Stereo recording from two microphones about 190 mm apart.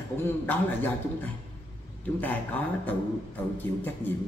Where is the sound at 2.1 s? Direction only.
10° left (ahead or behind).